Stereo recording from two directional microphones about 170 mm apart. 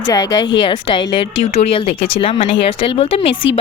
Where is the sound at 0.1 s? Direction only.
20° left (ahead or behind).